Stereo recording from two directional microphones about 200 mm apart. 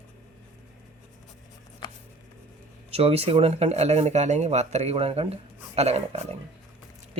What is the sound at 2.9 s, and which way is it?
Speech, 30° right (ahead or behind).